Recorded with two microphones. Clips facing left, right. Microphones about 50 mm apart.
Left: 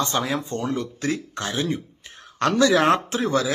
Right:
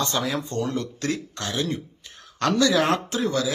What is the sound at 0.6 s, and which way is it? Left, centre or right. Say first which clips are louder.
Speech: even; centre.